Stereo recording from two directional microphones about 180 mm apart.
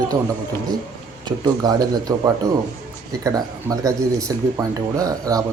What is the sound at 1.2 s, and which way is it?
Speech, 25° right (ahead or behind).